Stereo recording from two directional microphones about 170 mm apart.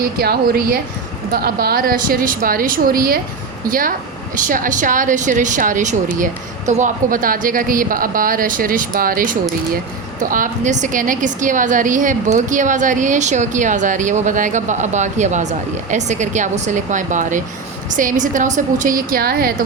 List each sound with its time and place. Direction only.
0.2 s a woman's voice: 65° right (ahead or behind)